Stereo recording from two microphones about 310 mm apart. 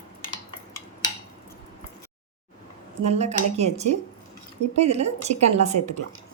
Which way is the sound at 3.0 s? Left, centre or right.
Right.